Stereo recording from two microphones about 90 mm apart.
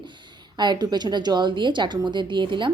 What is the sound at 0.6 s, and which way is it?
A woman's voice, 55° right (ahead or behind).